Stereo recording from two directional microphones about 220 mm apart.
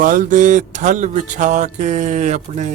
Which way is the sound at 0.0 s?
35° right (ahead or behind).